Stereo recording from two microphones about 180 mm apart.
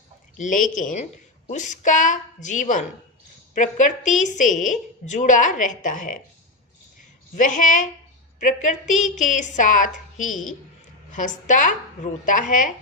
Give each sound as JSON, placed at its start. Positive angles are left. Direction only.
{"t": 0.3, "sound": "a woman's voice", "side_deg": 45}
{"t": 7.3, "sound": "a woman's voice", "side_deg": 45}